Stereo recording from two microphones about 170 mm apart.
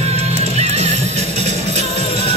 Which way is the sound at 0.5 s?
40° right (ahead or behind).